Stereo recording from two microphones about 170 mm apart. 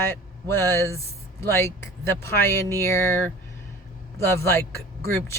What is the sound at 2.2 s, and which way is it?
Speech, 15° left (ahead or behind).